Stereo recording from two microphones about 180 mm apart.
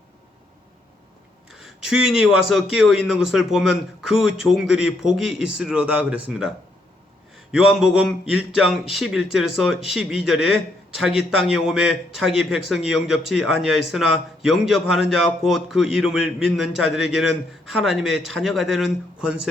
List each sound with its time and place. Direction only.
1.5 s speech: 5° right (ahead or behind)
7.5 s speech: 5° right (ahead or behind)